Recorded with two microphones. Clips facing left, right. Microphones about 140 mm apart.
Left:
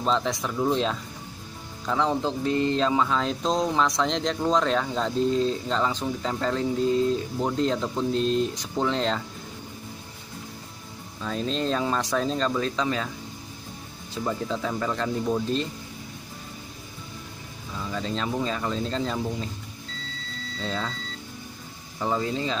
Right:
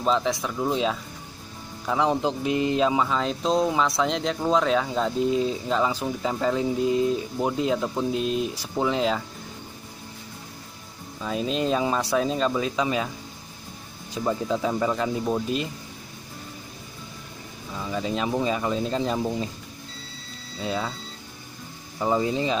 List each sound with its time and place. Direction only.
0.0 s speech: centre (ahead or behind)
1.9 s speech: 15° right (ahead or behind)
11.2 s speech: 10° right (ahead or behind)
14.1 s speech: 15° right (ahead or behind)
17.7 s speech: 10° right (ahead or behind)
20.5 s speech: 10° right (ahead or behind)
22.0 s speech: 15° right (ahead or behind)